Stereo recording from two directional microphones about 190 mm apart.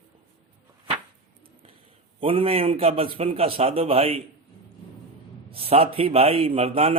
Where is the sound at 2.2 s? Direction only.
30° right (ahead or behind).